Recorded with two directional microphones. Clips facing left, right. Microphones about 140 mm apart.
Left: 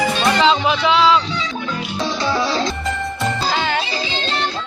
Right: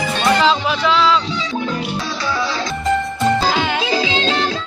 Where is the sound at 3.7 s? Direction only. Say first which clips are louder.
Right 4 dB; 90° right.